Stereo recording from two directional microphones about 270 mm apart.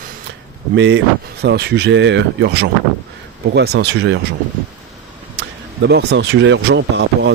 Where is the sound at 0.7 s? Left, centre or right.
Right.